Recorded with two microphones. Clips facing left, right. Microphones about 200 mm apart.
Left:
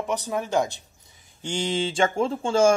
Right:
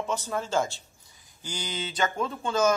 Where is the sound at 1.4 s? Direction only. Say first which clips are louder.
Left 9 dB; 25° left (ahead or behind).